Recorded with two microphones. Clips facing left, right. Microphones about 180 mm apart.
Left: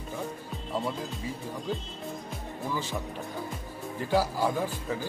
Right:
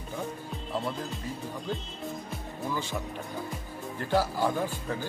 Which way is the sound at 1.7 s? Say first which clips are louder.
Left 1 dB; 5° left (ahead or behind).